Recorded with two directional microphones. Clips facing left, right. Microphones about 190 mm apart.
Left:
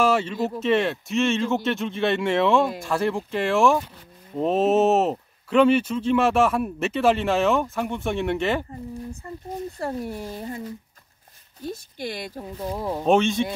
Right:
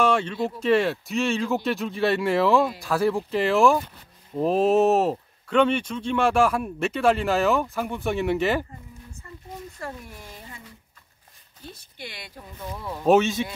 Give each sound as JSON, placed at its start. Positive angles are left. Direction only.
{"t": 0.0, "sound": "speech", "side_deg": 5}
{"t": 9.8, "sound": "speech", "side_deg": 35}
{"t": 11.7, "sound": "speech", "side_deg": 40}
{"t": 13.0, "sound": "speech", "side_deg": -5}